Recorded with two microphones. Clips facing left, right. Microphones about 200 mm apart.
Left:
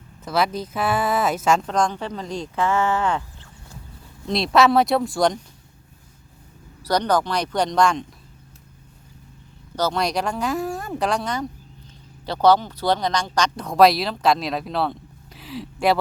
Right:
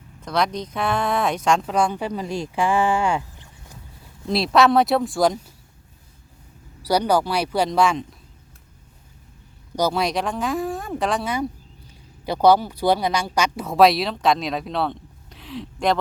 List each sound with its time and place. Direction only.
0.2 s speech: 5° left (ahead or behind)
1.7 s speech: 10° right (ahead or behind)
4.3 s speech: 5° right (ahead or behind)
6.8 s speech: 10° right (ahead or behind)
9.7 s speech: 15° right (ahead or behind)
10.0 s speech: centre (ahead or behind)